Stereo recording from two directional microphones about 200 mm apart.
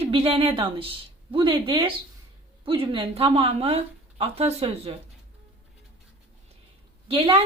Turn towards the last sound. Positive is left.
turn(degrees=-25)  # may be behind; listen again after turning